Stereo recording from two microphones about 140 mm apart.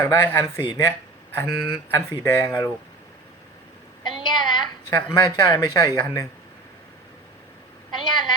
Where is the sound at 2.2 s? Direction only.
20° left (ahead or behind).